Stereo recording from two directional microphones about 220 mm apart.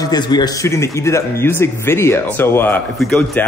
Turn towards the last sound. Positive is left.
turn(degrees=5)  # may be behind; listen again after turning